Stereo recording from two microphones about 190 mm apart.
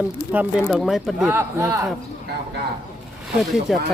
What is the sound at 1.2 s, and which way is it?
Speech, 15° right (ahead or behind).